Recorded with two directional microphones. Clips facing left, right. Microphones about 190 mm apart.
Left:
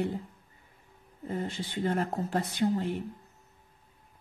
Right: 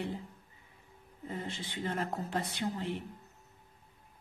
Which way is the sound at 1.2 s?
45° left (ahead or behind).